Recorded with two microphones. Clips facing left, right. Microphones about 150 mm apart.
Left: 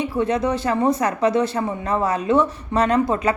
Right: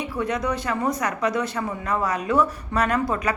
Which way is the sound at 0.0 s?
30° left (ahead or behind).